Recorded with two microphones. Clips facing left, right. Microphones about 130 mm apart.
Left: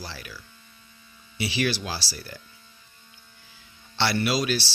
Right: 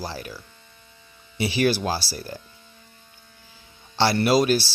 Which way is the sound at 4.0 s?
40° right (ahead or behind).